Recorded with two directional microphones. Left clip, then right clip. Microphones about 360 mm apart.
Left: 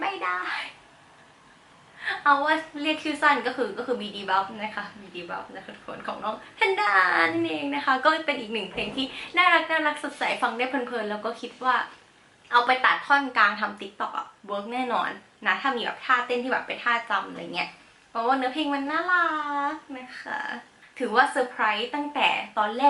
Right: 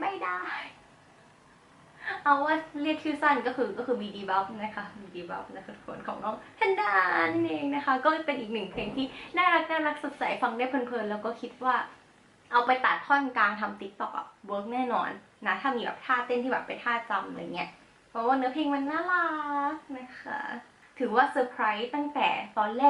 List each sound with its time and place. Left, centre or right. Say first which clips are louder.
0.0 s a sound: left 4 dB; centre
2.1 s a woman's voice: left 3 dB; centre
4.0 s a woman's voice: left 4 dB; centre
14.4 s speech: left 1 dB; centre
14.7 s a woman's voice: left 3 dB; centre